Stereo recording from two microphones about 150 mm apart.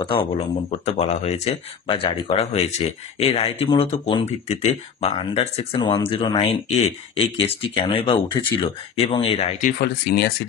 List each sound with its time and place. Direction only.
0.0 s speech: 35° left (ahead or behind)
0.7 s speech: 45° left (ahead or behind)
9.6 s speech: 80° left